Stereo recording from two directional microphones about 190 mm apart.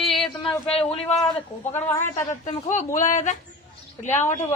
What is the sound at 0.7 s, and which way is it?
Speech, 30° left (ahead or behind).